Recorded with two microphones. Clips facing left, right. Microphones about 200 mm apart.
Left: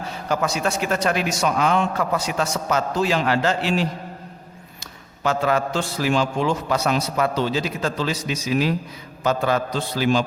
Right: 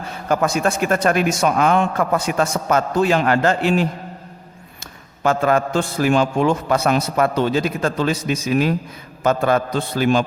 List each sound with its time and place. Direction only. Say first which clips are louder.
0.3 s a man's voice: right 4 dB; 50° right (ahead or behind)
5.2 s a man's voice: right 4 dB; 50° right (ahead or behind)